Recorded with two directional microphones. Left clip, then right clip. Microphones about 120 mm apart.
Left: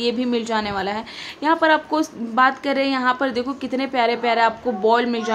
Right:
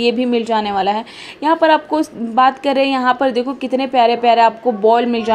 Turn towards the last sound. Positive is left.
turn(degrees=-15)  # may be behind; listen again after turning